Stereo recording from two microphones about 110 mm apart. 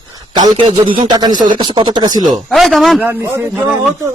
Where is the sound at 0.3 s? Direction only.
45° right (ahead or behind).